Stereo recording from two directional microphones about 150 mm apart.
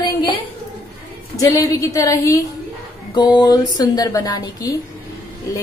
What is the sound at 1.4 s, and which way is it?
A woman's voice, 20° left (ahead or behind).